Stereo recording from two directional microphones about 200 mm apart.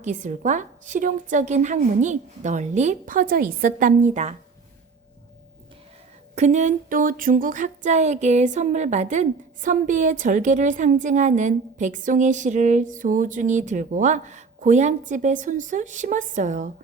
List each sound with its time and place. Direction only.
0.0 s speech: 40° right (ahead or behind)
6.3 s speech: 35° right (ahead or behind)